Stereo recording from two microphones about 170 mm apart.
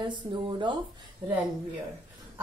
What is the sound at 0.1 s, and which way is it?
Speech, 25° right (ahead or behind).